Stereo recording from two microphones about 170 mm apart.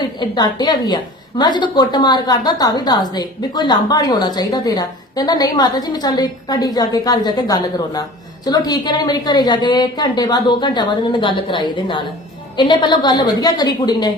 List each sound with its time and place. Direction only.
0.2 s a woman's voice: 25° left (ahead or behind)